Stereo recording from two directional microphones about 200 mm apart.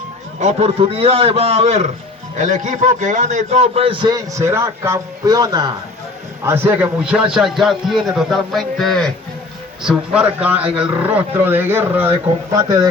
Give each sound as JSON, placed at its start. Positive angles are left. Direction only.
{"t": 0.3, "sound": "a man's voice", "side_deg": -30}